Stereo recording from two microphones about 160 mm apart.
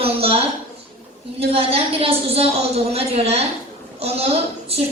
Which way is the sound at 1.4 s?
35° right (ahead or behind).